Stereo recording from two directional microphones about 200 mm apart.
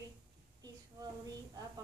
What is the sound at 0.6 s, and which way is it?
Child singing, 20° right (ahead or behind).